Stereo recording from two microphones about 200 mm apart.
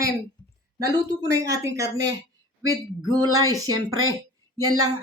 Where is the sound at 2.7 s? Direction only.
20° right (ahead or behind).